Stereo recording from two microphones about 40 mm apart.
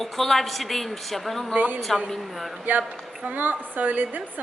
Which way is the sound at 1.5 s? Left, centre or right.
Right.